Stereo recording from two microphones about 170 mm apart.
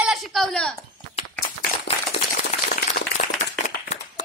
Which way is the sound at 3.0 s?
50° left (ahead or behind).